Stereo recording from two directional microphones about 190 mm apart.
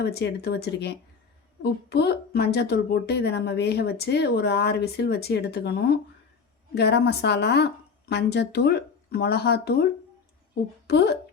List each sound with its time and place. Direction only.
0.0 s speech: 60° left (ahead or behind)
10.8 s speech: 60° left (ahead or behind)